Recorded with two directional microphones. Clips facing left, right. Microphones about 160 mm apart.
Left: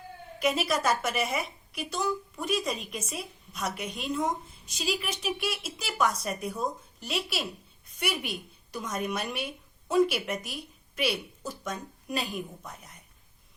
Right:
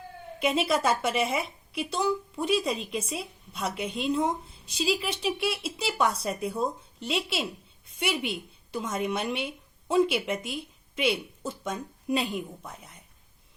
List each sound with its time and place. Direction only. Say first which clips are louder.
0.3 s a woman's voice: right 2 dB; 25° right (ahead or behind)